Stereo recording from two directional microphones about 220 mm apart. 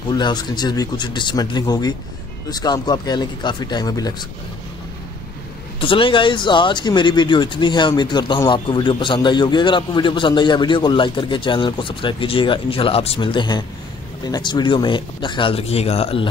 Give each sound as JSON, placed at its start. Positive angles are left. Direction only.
{"t": 0.1, "sound": "speech", "side_deg": 20}
{"t": 5.8, "sound": "speech", "side_deg": 25}